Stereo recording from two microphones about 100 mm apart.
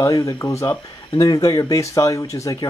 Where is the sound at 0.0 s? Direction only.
35° left (ahead or behind).